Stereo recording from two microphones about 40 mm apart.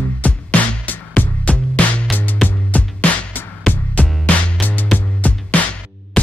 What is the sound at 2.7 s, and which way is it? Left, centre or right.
Music, left.